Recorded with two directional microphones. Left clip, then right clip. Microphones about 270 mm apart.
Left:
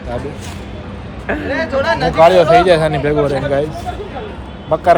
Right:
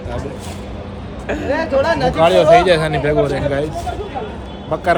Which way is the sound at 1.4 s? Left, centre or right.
Right.